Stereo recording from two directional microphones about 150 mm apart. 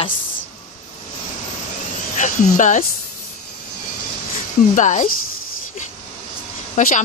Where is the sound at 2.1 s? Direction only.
55° left (ahead or behind).